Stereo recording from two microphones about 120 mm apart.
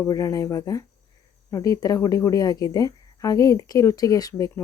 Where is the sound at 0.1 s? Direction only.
30° left (ahead or behind).